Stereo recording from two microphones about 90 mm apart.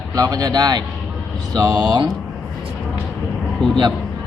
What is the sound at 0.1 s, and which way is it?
Speech, 40° right (ahead or behind).